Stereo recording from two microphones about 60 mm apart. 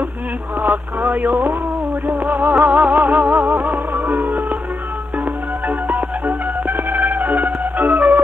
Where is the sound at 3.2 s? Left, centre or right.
Centre.